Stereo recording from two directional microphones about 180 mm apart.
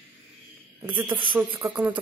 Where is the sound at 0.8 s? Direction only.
10° right (ahead or behind).